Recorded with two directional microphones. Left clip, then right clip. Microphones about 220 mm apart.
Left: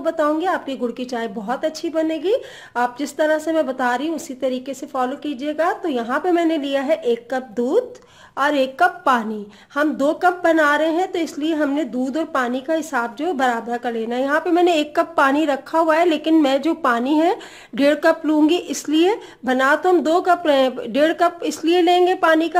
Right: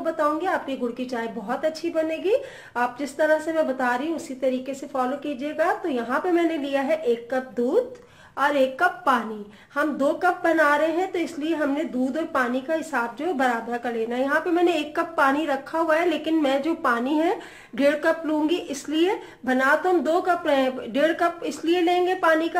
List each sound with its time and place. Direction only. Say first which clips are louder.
0.0 s a woman's voice: left 4 dB; 50° left (ahead or behind)